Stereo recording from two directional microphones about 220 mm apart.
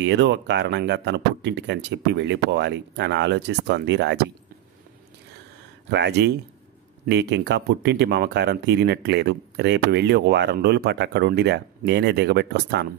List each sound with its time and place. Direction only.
0.0 s speech: 55° right (ahead or behind)
5.9 s speech: 50° right (ahead or behind)